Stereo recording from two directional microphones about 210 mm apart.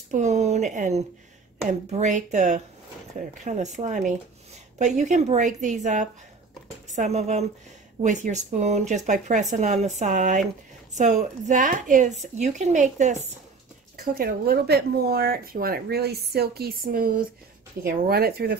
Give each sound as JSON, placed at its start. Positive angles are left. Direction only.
{"t": 0.1, "sound": "speech", "side_deg": -35}